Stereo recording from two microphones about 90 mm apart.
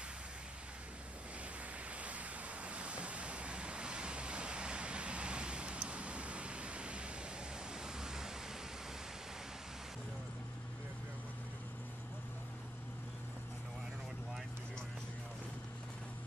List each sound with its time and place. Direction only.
2.0 s waves: 15° right (ahead or behind)
7.8 s pink noise: 5° right (ahead or behind)